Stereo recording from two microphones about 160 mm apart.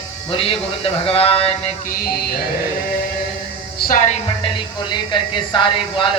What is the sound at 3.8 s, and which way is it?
Music, 60° left (ahead or behind).